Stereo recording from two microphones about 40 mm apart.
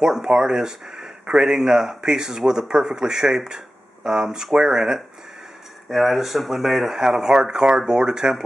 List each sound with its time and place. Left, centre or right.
0.0 s speech: centre
5.9 s speech: centre